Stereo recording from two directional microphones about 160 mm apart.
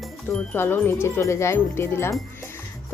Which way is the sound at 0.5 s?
15° left (ahead or behind).